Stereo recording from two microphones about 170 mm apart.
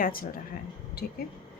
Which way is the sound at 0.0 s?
55° left (ahead or behind).